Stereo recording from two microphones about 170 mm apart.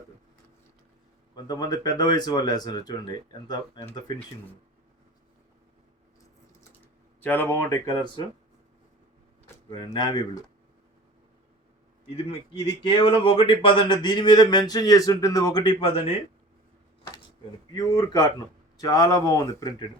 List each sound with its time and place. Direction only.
1.5 s speech: 25° left (ahead or behind)
7.2 s speech: 10° left (ahead or behind); by 8.3 s 25° left (ahead or behind)
9.6 s speech: 25° left (ahead or behind)
12.0 s speech: 35° left (ahead or behind)
17.7 s speech: 20° left (ahead or behind)